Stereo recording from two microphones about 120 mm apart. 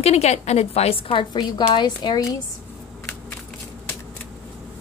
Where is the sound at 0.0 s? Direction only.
60° left (ahead or behind); by 2.2 s 40° left (ahead or behind).